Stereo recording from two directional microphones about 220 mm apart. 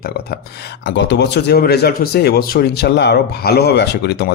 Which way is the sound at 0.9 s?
50° left (ahead or behind).